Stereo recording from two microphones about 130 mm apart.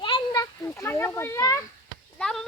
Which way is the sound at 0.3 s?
20° left (ahead or behind).